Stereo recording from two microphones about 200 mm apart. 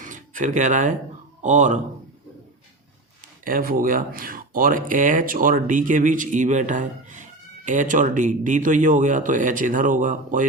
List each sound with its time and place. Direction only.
0.0 s a sound: 40° right (ahead or behind)
1.4 s a man's voice: 35° right (ahead or behind)
3.4 s speech: 45° right (ahead or behind)